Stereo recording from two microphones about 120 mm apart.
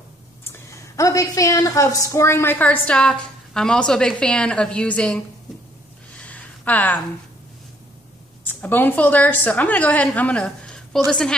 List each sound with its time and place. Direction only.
0.4 s a woman's voice: 25° left (ahead or behind)
6.1 s a sound: 10° left (ahead or behind)
8.5 s a woman's voice: 15° left (ahead or behind)